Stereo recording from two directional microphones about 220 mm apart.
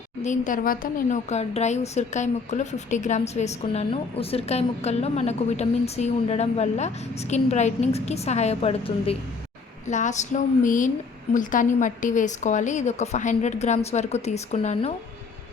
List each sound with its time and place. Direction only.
0.2 s a woman's voice: 35° left (ahead or behind)